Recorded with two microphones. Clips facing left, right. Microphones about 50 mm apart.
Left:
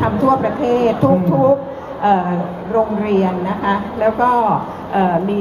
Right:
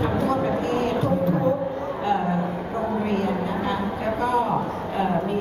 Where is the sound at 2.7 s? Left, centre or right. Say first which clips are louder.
Left 11 dB; left.